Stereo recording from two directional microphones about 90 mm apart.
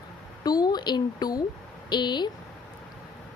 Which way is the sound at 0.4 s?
50° left (ahead or behind).